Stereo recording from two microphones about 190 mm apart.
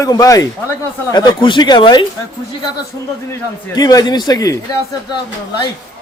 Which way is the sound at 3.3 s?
20° left (ahead or behind).